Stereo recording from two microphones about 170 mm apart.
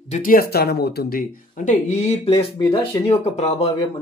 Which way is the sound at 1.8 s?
40° left (ahead or behind).